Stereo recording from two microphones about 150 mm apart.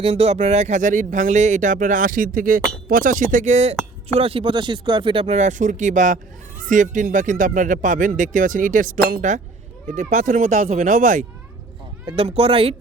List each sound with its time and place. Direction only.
0.0 s speech: 45° right (ahead or behind)
4.1 s speech: 40° right (ahead or behind)
5.2 s speech: 50° right (ahead or behind)
9.9 s speech: 55° right (ahead or behind)
12.0 s speech: 40° right (ahead or behind)